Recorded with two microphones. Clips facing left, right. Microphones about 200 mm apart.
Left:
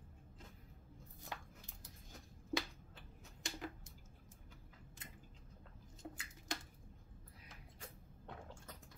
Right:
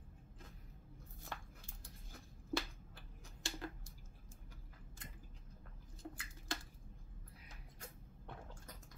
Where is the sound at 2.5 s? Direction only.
20° left (ahead or behind).